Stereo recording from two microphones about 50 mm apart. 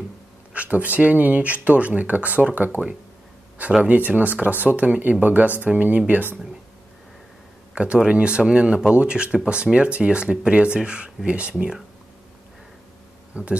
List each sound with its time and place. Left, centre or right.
0.5 s speech: right
3.8 s speech: right
7.7 s speech: right
13.3 s speech: right